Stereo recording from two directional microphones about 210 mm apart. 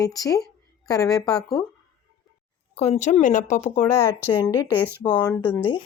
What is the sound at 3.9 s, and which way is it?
A woman's voice, 15° left (ahead or behind).